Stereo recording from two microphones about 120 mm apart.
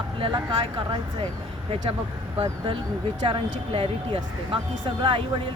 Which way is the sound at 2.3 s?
50° right (ahead or behind).